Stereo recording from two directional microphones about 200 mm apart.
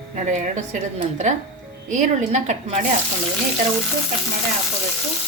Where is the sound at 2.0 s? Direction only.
35° right (ahead or behind).